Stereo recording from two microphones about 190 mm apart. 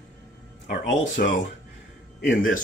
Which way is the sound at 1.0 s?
40° left (ahead or behind).